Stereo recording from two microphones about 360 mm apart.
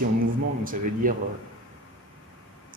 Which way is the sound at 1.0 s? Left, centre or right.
Right.